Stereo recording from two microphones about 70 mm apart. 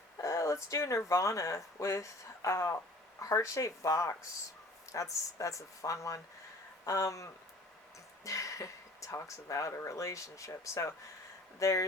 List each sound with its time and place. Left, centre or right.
0.2 s speech: left